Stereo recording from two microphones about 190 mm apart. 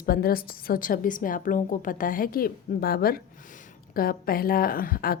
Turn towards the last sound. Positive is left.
turn(degrees=50)  # may be behind; listen again after turning